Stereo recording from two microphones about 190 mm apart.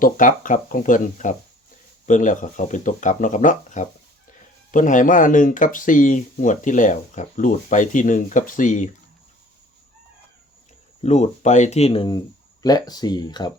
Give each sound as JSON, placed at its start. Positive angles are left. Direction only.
{"t": 0.0, "sound": "speech", "side_deg": 45}
{"t": 11.0, "sound": "speech", "side_deg": 35}